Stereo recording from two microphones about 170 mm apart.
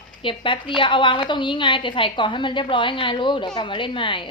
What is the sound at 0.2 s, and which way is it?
A woman's voice, 30° left (ahead or behind).